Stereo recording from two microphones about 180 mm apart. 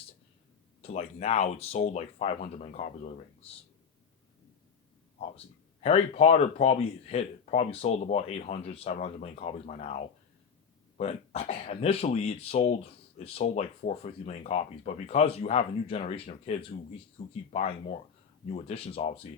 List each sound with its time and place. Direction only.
0.8 s speech: 35° left (ahead or behind)
5.8 s speech: 35° left (ahead or behind)